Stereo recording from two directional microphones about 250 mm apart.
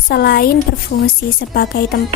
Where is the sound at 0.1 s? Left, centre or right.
Left.